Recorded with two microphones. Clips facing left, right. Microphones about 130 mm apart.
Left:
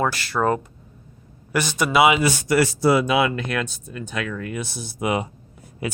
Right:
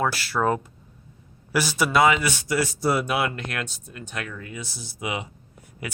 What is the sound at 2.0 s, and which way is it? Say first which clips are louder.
Speech: left 3 dB; 10° left (ahead or behind).